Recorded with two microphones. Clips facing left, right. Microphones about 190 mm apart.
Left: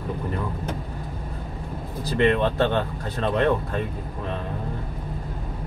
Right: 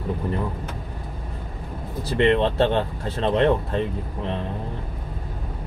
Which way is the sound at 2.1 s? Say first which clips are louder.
Right 2 dB; 25° right (ahead or behind).